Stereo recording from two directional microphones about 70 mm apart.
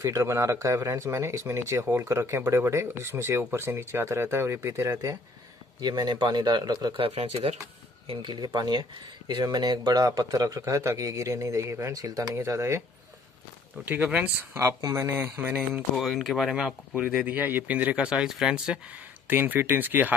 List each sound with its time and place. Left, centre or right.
0.0 s speech: right
5.8 s speech: right
8.5 s speech: right
9.4 s speech: right
11.9 s speech: right
12.4 s speech: right
13.7 s speech: right
14.6 s speech: right
15.0 s speech: right
16.0 s speech: centre
17.3 s speech: right
19.2 s speech: right